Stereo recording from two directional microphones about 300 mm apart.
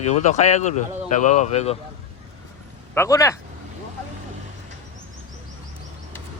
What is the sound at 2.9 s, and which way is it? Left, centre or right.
Speech, centre.